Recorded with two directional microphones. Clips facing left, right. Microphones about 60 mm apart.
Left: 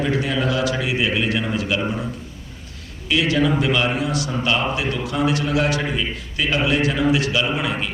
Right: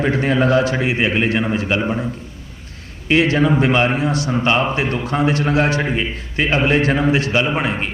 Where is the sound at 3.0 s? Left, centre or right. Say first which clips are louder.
Right 4 dB; right.